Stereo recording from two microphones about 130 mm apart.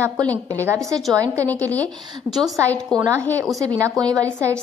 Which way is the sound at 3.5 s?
25° right (ahead or behind).